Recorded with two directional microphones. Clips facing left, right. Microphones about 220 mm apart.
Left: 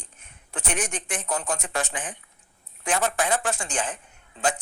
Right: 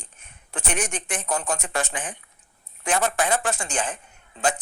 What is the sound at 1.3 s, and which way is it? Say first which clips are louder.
Speech: right 2 dB; 60° right (ahead or behind).